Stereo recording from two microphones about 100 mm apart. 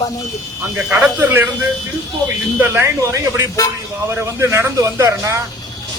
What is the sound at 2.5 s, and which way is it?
A man's voice, 20° right (ahead or behind).